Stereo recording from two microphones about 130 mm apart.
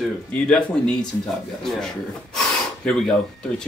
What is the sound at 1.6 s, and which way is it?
Speech, 5° left (ahead or behind).